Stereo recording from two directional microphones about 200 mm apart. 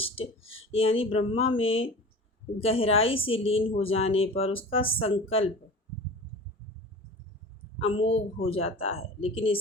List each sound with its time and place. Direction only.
0.0 s speech: 30° left (ahead or behind)
7.8 s a woman's voice: 30° left (ahead or behind)